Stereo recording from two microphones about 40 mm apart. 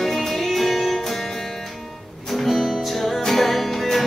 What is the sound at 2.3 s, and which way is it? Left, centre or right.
Music, centre.